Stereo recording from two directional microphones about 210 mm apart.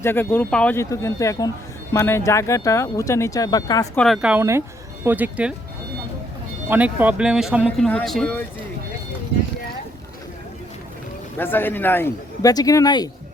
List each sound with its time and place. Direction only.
0.0 s speech: 10° left (ahead or behind)
3.9 s speech: centre (ahead or behind)
6.7 s speech: 5° right (ahead or behind)
11.3 s speech: 10° left (ahead or behind)